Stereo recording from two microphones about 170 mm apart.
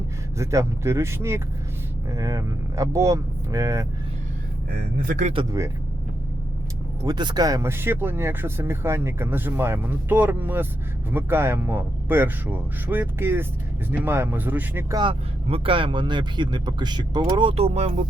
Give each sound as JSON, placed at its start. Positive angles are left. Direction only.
{"t": 0.3, "sound": "speech", "side_deg": -15}
{"t": 5.0, "sound": "speech", "side_deg": -45}
{"t": 7.0, "sound": "speech", "side_deg": -25}
{"t": 14.9, "sound": "speech", "side_deg": -30}